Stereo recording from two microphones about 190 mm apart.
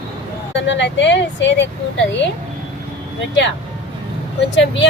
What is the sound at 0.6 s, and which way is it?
A woman's voice, 70° left (ahead or behind).